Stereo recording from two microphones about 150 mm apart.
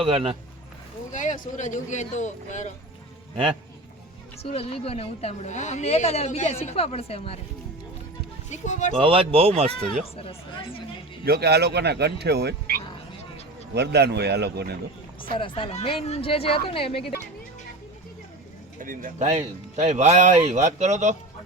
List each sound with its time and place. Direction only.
0.0 s speech: 40° right (ahead or behind)
1.1 s speech: 55° left (ahead or behind)
4.4 s a woman's voice: 40° left (ahead or behind)
8.4 s a woman's voice: 55° left (ahead or behind)
9.0 s speech: 40° right (ahead or behind)
10.2 s a woman's voice: 40° left (ahead or behind)
11.3 s speech: 90° right
15.2 s a woman's voice: 35° left (ahead or behind)
18.8 s speech: 65° right (ahead or behind)